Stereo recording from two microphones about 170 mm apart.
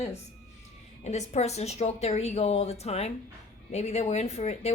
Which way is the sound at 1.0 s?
40° left (ahead or behind).